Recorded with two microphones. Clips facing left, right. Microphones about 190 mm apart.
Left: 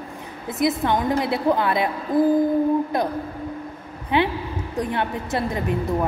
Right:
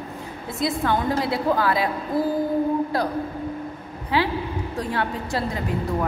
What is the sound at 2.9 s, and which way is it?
Speech, 20° left (ahead or behind).